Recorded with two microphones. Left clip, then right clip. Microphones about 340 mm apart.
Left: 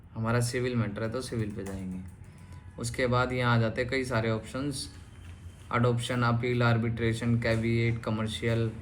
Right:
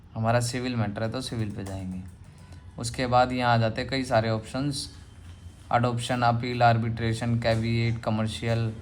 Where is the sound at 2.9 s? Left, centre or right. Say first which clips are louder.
Right 5 dB; right.